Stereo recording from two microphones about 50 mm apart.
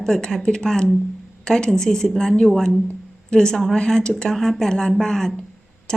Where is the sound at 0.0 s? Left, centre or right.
Centre.